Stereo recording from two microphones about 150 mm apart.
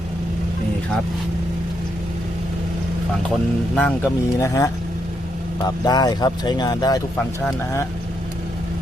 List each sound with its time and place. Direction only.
3.8 s speech: 10° left (ahead or behind)
4.4 s speech: 20° left (ahead or behind)